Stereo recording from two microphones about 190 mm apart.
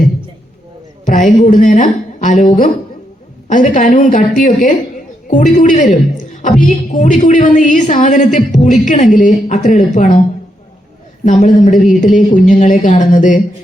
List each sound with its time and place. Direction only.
1.0 s a woman's voice: 40° left (ahead or behind)
11.3 s a woman's voice: 40° left (ahead or behind)